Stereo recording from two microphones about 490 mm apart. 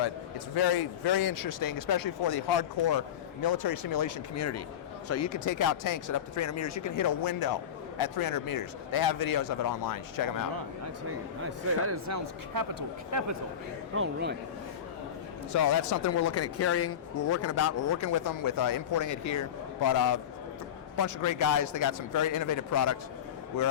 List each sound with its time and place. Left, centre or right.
0.5 s speech: left
11.9 s speech: right
13.9 s speech: right
15.5 s speech: left